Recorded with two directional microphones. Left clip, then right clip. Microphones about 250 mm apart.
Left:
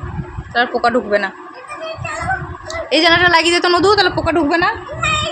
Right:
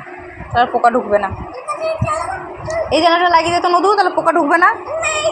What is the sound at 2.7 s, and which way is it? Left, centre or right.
A woman's voice, centre.